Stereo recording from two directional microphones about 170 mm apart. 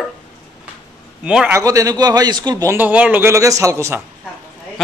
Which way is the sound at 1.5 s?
20° right (ahead or behind).